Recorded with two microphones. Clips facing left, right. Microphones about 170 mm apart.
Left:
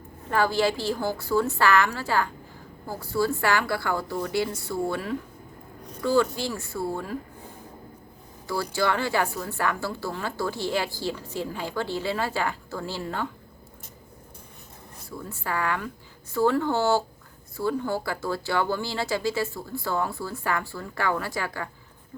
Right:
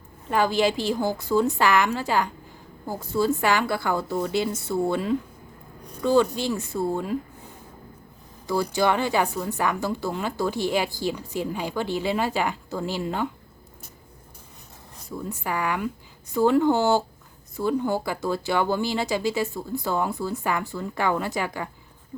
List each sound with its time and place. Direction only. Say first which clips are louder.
0.3 s a woman's voice: right 2 dB; 15° right (ahead or behind)
8.4 s speech: right 4 dB; 15° right (ahead or behind)
15.2 s speech: right 1 dB; 15° right (ahead or behind)